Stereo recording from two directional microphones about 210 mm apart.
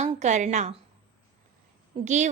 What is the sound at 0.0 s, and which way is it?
Speech, 35° right (ahead or behind).